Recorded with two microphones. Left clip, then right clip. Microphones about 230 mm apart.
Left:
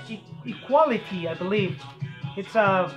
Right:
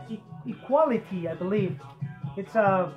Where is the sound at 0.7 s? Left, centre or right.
Centre.